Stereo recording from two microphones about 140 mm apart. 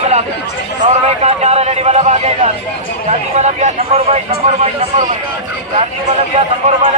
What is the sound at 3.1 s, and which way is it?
Speech, 55° right (ahead or behind).